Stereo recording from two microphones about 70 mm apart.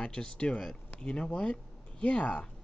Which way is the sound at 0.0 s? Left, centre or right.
Centre.